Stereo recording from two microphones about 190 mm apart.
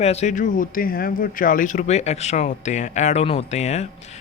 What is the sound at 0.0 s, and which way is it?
Speech, 35° left (ahead or behind).